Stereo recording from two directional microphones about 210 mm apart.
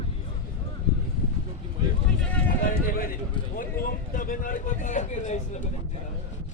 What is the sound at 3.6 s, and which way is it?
Speech, 40° left (ahead or behind).